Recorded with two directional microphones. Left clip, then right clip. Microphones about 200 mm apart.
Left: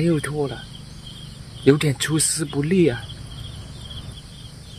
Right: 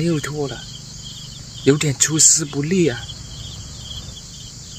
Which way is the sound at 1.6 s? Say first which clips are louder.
Right 1 dB; 5° left (ahead or behind).